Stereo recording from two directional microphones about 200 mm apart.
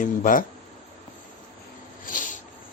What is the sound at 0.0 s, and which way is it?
Speech, 40° left (ahead or behind).